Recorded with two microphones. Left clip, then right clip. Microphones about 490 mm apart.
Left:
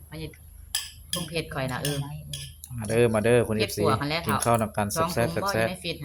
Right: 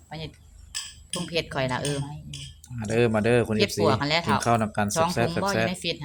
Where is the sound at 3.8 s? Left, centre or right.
Centre.